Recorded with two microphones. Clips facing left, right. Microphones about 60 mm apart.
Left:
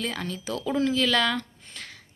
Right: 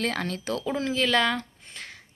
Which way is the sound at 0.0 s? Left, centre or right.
Right.